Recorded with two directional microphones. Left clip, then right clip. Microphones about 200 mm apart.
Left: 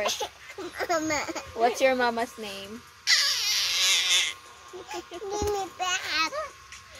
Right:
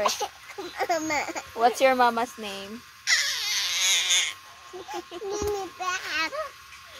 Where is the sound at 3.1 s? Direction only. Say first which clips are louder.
Left 1 dB; 10° right (ahead or behind).